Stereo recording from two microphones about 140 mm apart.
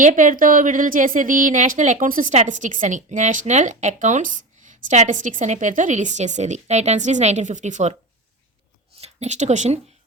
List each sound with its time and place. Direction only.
0.0 s speech: 65° right (ahead or behind)
9.0 s speech: 55° right (ahead or behind)